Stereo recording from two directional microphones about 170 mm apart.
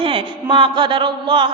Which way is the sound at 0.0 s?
30° right (ahead or behind).